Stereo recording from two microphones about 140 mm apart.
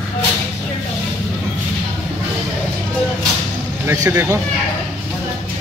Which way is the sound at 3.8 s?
20° right (ahead or behind).